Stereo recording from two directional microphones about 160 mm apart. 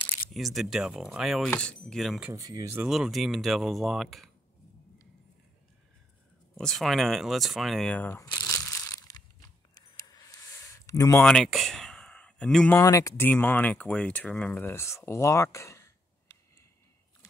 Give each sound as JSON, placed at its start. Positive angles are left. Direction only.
{"t": 0.3, "sound": "speech", "side_deg": 0}
{"t": 2.3, "sound": "speech", "side_deg": -20}
{"t": 2.8, "sound": "speech", "side_deg": 0}
{"t": 6.5, "sound": "speech", "side_deg": 5}
{"t": 8.3, "sound": "a sound", "side_deg": 15}
{"t": 11.1, "sound": "a sound", "side_deg": 5}
{"t": 12.7, "sound": "speech", "side_deg": 20}
{"t": 13.3, "sound": "speech", "side_deg": 10}